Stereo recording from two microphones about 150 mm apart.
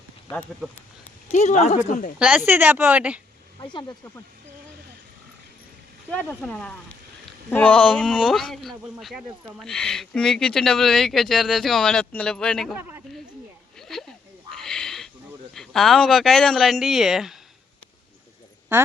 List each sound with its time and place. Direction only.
0.6 s speech: 5° right (ahead or behind)
1.3 s speech: 50° left (ahead or behind)
2.1 s speech: 5° right (ahead or behind)
3.6 s speech: 30° left (ahead or behind)
6.1 s speech: 10° left (ahead or behind)
13.7 s a sound: centre (ahead or behind)
15.5 s speech: centre (ahead or behind)